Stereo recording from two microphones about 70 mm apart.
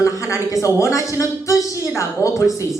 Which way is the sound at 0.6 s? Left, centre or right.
Left.